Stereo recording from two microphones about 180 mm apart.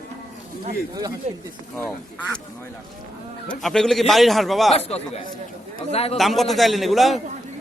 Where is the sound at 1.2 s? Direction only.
40° right (ahead or behind).